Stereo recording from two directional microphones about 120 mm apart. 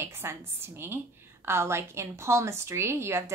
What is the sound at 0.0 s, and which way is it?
A woman's voice, 20° right (ahead or behind).